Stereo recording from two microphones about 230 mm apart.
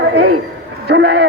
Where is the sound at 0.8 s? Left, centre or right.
Right.